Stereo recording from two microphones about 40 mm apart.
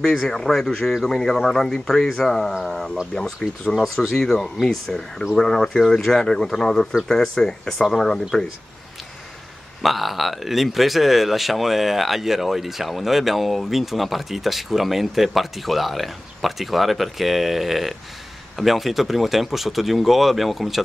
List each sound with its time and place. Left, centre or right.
0.0 s speech: centre
3.7 s speech: centre
9.8 s speech: centre